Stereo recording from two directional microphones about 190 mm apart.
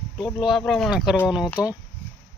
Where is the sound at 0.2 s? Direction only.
Centre (ahead or behind).